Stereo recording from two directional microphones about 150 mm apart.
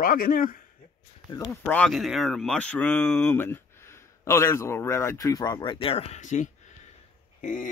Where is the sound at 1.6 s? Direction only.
10° left (ahead or behind).